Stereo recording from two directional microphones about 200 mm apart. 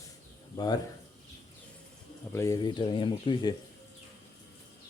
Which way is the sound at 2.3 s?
15° left (ahead or behind).